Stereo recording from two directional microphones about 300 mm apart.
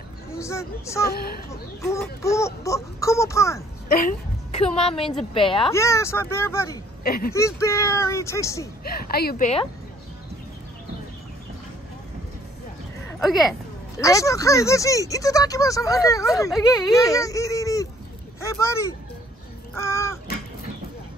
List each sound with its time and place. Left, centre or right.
0.3 s speech: centre
1.0 s speech: left
1.8 s speech: centre
3.9 s a woman's voice: left; by 6.8 s centre
7.0 s speech: left
7.3 s speech: centre
8.8 s a woman's voice: left
13.2 s speech: centre
13.9 s speech: centre
19.8 s crow: centre